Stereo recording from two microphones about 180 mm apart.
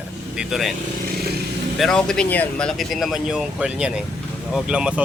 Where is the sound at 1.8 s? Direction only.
5° left (ahead or behind).